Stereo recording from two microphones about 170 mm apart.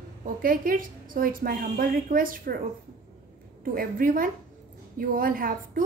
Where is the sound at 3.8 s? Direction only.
55° right (ahead or behind).